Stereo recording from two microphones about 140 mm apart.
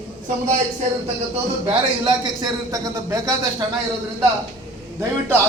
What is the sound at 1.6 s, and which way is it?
A man's voice, 30° right (ahead or behind).